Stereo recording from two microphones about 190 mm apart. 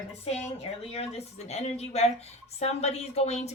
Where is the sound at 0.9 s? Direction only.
35° left (ahead or behind).